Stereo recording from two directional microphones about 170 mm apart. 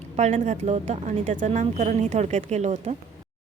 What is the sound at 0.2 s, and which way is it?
A woman's voice, 45° right (ahead or behind).